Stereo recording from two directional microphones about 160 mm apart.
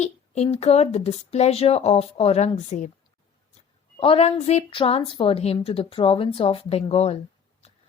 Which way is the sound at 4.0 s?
35° left (ahead or behind).